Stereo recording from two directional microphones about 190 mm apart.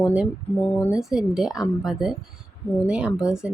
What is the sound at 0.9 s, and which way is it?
A woman's voice, 5° right (ahead or behind).